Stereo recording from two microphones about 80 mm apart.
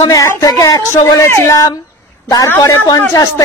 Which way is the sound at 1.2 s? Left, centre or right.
Left.